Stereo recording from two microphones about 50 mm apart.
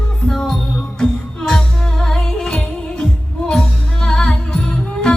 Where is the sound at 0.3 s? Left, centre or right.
Centre.